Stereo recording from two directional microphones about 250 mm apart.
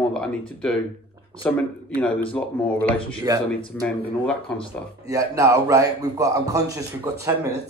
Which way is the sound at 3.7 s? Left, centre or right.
Centre.